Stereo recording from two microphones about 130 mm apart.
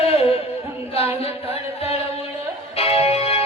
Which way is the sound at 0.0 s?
50° left (ahead or behind).